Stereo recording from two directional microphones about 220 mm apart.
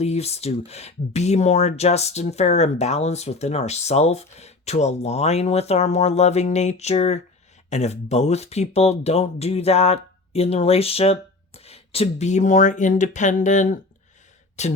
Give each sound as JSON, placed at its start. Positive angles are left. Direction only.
{"t": 0.0, "sound": "speech", "side_deg": 30}